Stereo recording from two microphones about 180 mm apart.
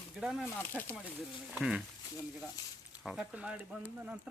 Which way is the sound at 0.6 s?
10° left (ahead or behind).